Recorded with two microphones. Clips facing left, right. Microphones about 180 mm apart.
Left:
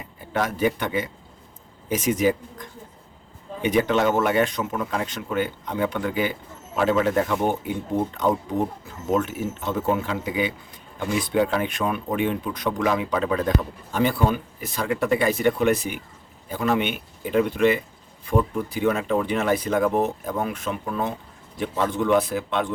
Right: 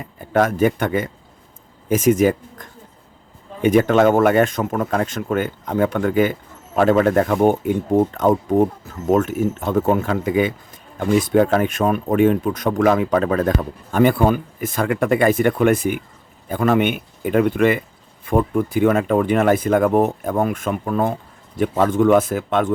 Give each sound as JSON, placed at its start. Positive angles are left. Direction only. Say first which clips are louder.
{"t": 0.2, "sound": "speech", "louder": "right 7 dB", "side_deg": -50}